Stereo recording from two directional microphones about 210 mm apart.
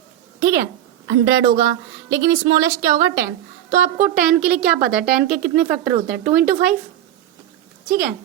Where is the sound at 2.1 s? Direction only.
15° right (ahead or behind).